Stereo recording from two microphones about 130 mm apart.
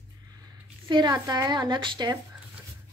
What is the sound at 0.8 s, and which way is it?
Speech, 35° right (ahead or behind).